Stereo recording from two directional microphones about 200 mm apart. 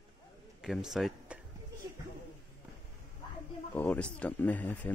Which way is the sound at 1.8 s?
15° right (ahead or behind).